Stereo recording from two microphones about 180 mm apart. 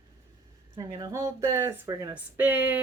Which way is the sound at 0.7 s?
20° right (ahead or behind).